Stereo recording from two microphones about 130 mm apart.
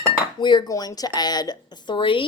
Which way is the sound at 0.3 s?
35° left (ahead or behind).